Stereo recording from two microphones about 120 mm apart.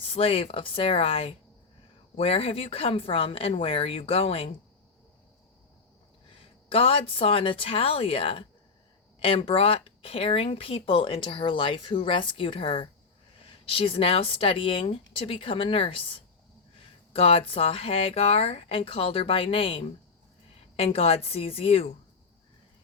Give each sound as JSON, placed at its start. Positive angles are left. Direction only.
{"t": 0.0, "sound": "speech", "side_deg": 50}
{"t": 6.3, "sound": "speech", "side_deg": 50}